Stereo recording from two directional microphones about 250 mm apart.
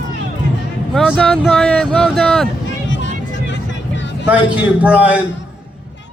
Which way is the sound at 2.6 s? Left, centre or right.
Left.